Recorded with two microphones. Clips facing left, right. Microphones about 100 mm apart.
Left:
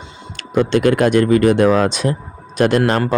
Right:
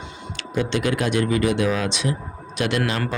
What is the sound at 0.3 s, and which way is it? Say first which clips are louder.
Speech: left 8 dB; 50° left (ahead or behind).